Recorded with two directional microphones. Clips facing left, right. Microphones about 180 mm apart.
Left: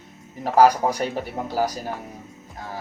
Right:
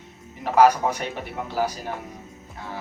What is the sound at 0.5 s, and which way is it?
Speech, 35° left (ahead or behind).